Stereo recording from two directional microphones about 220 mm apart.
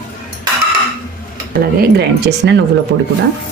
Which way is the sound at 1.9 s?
50° right (ahead or behind).